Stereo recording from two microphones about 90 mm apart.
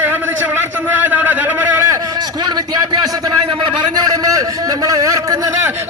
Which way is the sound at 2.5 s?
50° right (ahead or behind).